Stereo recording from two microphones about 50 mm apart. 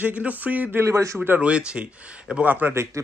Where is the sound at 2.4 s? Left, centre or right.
Right.